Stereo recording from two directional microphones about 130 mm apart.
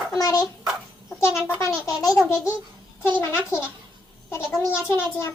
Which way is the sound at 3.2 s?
20° left (ahead or behind).